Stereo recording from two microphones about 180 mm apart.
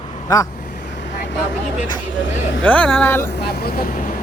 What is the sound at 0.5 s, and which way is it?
Vehicle, 60° left (ahead or behind).